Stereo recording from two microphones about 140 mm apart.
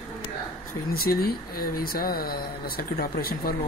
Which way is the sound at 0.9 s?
90° left.